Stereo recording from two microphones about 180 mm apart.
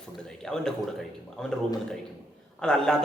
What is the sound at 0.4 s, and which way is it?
A man's voice, 5° left (ahead or behind).